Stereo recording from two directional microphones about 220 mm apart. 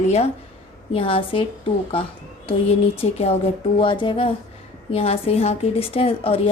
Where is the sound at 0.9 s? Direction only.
25° left (ahead or behind).